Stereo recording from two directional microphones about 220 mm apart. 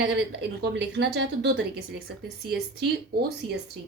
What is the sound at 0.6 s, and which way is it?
A woman's voice, 50° right (ahead or behind).